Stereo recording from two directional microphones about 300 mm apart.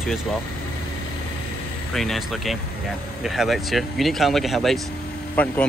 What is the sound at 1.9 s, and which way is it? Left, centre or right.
Speech, centre.